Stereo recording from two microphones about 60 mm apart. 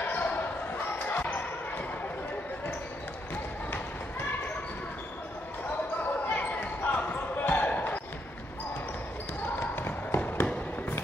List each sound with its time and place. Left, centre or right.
0.0 s basketball bounce: left
6.2 s basketball bounce: left
9.6 s a sound: left